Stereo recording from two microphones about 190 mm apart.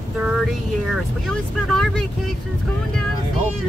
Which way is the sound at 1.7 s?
Centre (ahead or behind).